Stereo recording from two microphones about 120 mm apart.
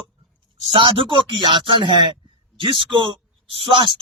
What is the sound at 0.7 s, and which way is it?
A man's voice, 45° right (ahead or behind).